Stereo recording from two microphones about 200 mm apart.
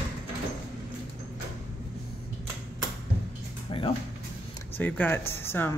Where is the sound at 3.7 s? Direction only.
25° left (ahead or behind).